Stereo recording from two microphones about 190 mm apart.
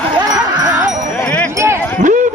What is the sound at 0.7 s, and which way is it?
Music, 5° right (ahead or behind).